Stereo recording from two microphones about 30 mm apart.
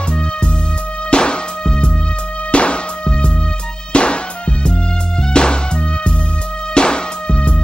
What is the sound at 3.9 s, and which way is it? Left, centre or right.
Music, left.